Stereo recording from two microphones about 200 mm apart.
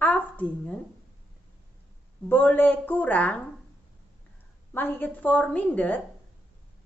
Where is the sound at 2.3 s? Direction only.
10° left (ahead or behind).